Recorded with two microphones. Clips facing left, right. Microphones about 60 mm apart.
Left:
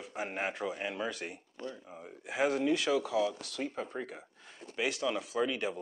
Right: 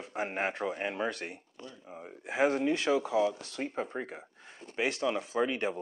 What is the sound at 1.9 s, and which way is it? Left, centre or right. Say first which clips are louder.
Speech: right 2 dB; centre.